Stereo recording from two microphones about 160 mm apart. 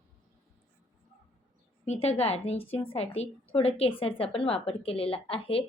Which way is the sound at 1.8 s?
40° left (ahead or behind).